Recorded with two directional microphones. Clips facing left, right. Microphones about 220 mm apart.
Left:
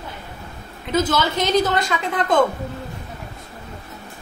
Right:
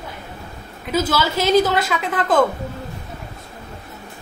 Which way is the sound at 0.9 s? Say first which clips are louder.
Even; 5° right (ahead or behind).